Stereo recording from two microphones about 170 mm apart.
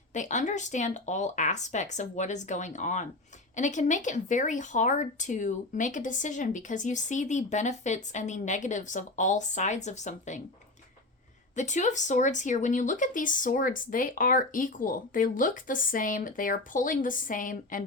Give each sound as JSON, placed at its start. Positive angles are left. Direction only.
{"t": 0.1, "sound": "speech", "side_deg": 45}
{"t": 11.5, "sound": "speech", "side_deg": 45}